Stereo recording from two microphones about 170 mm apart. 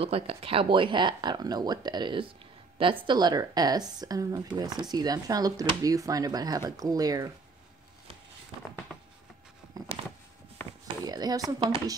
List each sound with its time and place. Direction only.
0.0 s speech: 35° right (ahead or behind)
9.8 s a sound: 20° right (ahead or behind)
11.1 s speech: 25° right (ahead or behind)